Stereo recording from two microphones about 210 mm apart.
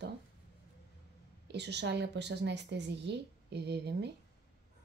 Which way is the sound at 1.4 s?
55° right (ahead or behind).